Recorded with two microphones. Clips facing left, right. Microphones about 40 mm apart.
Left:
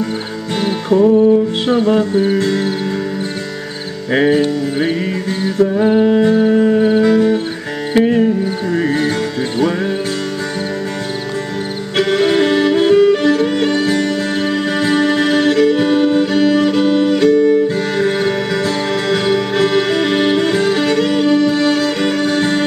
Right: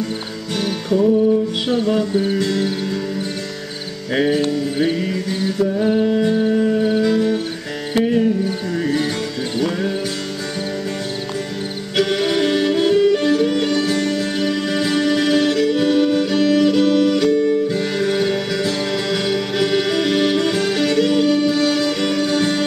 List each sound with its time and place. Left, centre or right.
0.6 s music: left
4.1 s music: left
8.7 s music: left
12.0 s music: left